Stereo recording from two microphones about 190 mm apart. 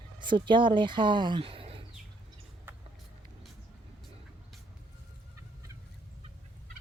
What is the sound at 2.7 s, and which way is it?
Vehicle, 10° right (ahead or behind).